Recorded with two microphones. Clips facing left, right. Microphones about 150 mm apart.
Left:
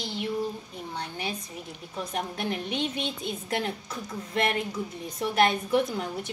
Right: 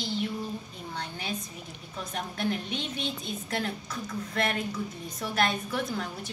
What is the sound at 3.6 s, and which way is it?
A woman's voice, 20° left (ahead or behind).